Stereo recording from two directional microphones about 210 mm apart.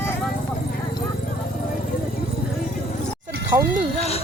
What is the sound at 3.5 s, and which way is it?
Speech, 25° right (ahead or behind).